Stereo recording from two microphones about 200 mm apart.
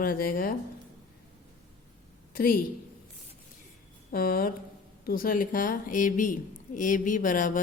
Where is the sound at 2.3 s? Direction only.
45° left (ahead or behind).